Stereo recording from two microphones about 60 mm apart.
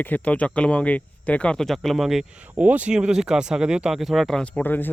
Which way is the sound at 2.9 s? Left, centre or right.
Centre.